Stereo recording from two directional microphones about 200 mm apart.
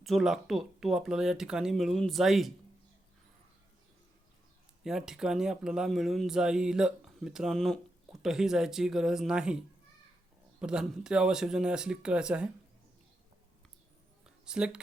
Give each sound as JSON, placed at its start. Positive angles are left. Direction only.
{"t": 0.0, "sound": "speech", "side_deg": 0}
{"t": 4.8, "sound": "speech", "side_deg": 0}
{"t": 14.3, "sound": "a sound", "side_deg": -5}